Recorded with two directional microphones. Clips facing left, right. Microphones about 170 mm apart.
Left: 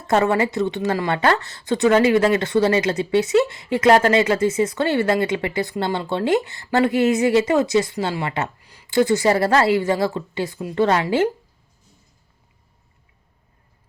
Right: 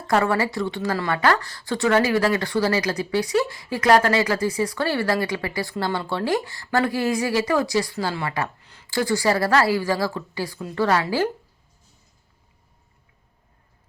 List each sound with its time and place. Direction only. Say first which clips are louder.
0.1 s speech: left 3 dB; 20° left (ahead or behind)
8.6 s a sound: left 1 dB; 10° left (ahead or behind)
9.0 s speech: left 4 dB; 20° left (ahead or behind)